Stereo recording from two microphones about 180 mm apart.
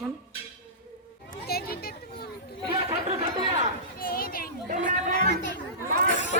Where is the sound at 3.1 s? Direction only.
40° right (ahead or behind).